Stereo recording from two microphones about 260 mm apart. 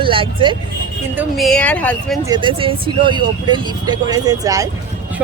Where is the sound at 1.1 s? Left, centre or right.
Centre.